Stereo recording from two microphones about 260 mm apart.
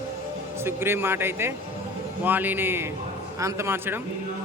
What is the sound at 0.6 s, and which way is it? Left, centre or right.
A man's voice, centre.